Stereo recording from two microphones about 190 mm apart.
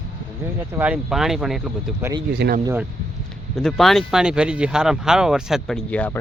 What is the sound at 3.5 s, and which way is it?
Speech, centre (ahead or behind).